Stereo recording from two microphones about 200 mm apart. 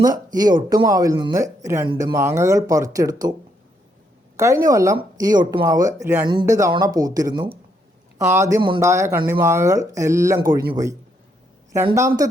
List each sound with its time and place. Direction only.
0.0 s speech: 20° right (ahead or behind)
4.4 s speech: 15° right (ahead or behind)
11.9 s speech: 15° right (ahead or behind)